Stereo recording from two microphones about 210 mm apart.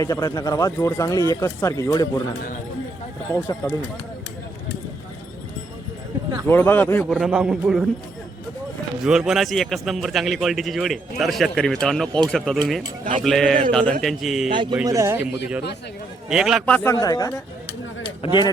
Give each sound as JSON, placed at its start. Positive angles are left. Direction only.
{"t": 0.0, "sound": "a man's voice", "side_deg": 15}
{"t": 3.3, "sound": "a man's voice", "side_deg": 15}
{"t": 6.5, "sound": "a man's voice", "side_deg": 10}
{"t": 9.0, "sound": "a man's voice", "side_deg": -5}
{"t": 14.5, "sound": "a man's voice", "side_deg": -20}